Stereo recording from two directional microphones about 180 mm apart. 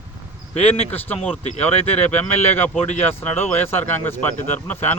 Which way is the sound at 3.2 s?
10° left (ahead or behind).